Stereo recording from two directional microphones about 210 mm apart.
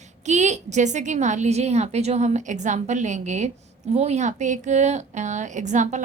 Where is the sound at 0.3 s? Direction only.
35° right (ahead or behind).